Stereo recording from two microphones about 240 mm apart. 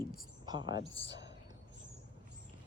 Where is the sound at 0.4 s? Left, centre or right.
Centre.